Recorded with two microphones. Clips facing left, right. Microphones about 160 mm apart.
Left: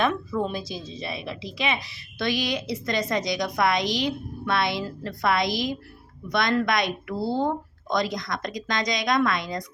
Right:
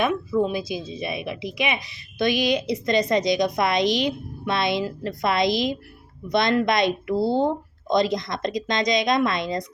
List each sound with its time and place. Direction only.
0.0 s a woman's voice: 10° right (ahead or behind)